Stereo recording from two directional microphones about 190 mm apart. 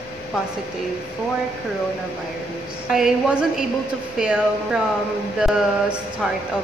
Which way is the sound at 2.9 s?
5° right (ahead or behind).